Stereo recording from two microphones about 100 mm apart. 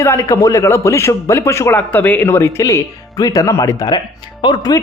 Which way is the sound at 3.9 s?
50° left (ahead or behind).